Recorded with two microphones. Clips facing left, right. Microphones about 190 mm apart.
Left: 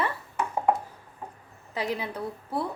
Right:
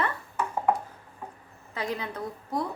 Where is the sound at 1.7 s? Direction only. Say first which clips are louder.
Left 2 dB; 10° left (ahead or behind).